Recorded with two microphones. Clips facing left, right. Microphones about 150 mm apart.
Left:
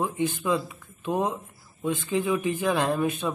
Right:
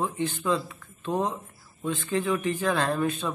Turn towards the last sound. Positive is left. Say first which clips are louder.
# left 1 dB
turn(degrees=15)  # may be behind; listen again after turning